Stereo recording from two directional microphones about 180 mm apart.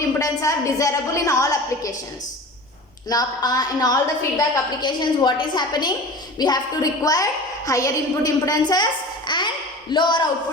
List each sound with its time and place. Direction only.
0.2 s a woman's voice: 20° left (ahead or behind)
3.1 s a woman's voice: 20° left (ahead or behind)